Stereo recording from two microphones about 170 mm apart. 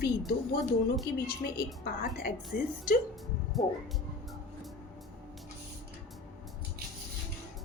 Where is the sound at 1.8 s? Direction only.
60° left (ahead or behind).